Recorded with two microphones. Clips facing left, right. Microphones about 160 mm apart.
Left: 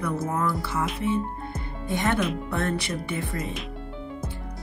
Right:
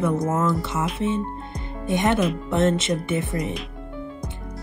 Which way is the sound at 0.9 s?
25° right (ahead or behind).